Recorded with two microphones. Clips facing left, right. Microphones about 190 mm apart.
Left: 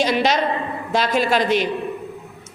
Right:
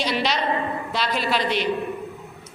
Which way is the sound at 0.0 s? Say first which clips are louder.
Left 5 dB; 45° left (ahead or behind).